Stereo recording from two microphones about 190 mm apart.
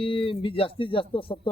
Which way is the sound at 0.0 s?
30° left (ahead or behind).